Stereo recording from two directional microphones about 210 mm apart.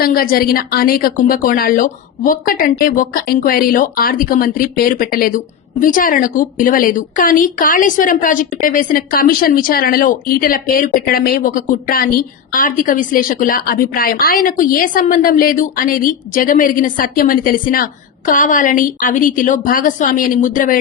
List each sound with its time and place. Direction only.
0.0 s a woman's voice: 45° left (ahead or behind)